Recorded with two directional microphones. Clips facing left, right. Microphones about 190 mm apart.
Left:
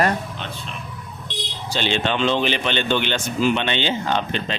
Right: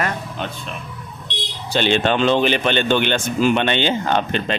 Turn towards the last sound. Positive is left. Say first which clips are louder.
# right 3 dB
turn(degrees=-55)  # may be behind; listen again after turning